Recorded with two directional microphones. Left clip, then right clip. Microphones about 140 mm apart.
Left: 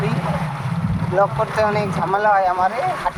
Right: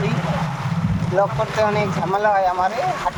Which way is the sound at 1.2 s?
35° left (ahead or behind).